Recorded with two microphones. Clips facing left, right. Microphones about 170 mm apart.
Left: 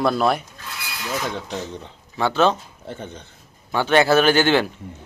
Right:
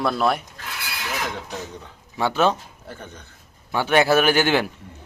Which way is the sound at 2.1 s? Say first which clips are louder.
Left 2 dB; 10° right (ahead or behind).